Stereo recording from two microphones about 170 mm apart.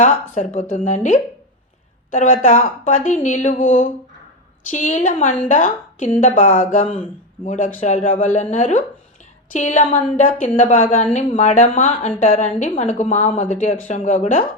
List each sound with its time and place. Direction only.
0.0 s a woman's voice: 50° left (ahead or behind)